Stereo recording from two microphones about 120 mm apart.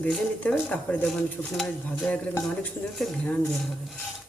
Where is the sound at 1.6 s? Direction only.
20° left (ahead or behind).